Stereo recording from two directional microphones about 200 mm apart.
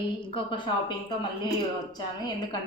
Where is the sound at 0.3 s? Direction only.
25° left (ahead or behind).